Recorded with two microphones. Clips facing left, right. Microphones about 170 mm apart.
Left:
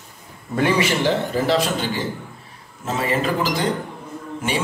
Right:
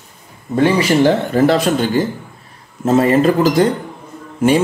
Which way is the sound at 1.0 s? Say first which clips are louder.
Right 7 dB; 55° right (ahead or behind).